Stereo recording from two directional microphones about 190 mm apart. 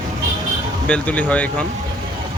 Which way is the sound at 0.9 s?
5° left (ahead or behind).